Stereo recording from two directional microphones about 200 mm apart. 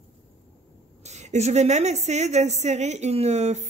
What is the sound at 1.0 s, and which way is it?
A woman's voice, 35° right (ahead or behind).